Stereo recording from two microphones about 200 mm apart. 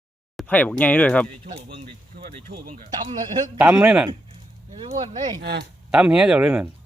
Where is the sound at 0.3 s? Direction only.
10° left (ahead or behind).